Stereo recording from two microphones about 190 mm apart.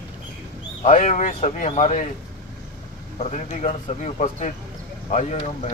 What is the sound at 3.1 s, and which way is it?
Speech, 35° left (ahead or behind).